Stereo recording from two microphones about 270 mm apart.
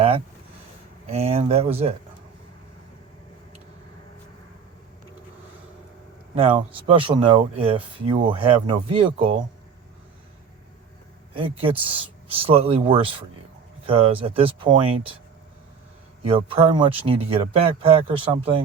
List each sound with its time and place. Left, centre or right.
1.0 s speech: right
6.3 s a man's voice: centre
11.3 s speech: centre
16.2 s speech: centre